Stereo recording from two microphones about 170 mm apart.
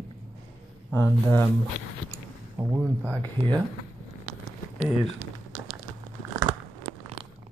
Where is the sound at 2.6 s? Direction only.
10° right (ahead or behind).